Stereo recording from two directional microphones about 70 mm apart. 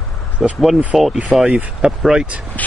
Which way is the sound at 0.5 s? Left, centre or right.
Centre.